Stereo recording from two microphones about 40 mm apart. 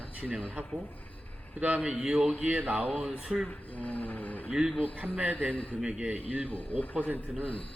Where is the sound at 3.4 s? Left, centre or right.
Left.